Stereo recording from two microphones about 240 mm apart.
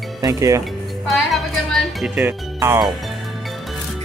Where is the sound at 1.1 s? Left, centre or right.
Centre.